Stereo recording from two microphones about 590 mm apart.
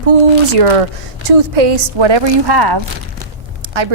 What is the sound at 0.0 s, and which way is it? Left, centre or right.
A woman's voice, right.